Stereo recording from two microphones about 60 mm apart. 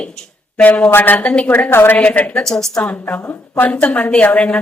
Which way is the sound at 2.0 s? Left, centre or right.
Left.